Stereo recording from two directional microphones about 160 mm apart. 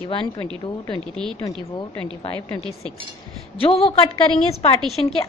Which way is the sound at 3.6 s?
35° left (ahead or behind).